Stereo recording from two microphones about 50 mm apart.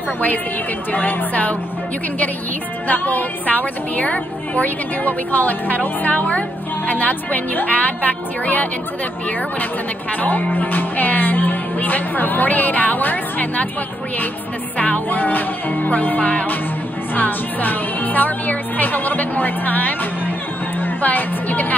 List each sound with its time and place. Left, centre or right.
0.9 s a woman's voice: left
2.9 s a woman's voice: left
10.2 s a woman's voice: left
14.8 s a woman's voice: left